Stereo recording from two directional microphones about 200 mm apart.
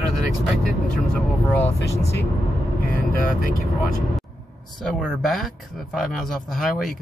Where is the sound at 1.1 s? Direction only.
10° left (ahead or behind).